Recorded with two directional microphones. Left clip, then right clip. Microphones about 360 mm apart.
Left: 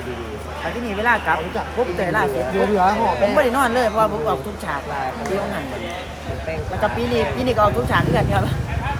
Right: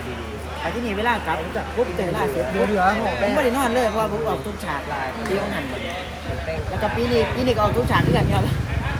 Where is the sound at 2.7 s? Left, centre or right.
Left.